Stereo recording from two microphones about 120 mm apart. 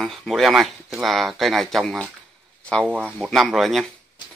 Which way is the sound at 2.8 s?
10° right (ahead or behind).